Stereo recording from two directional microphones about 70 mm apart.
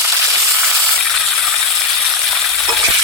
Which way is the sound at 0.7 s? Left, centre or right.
Centre.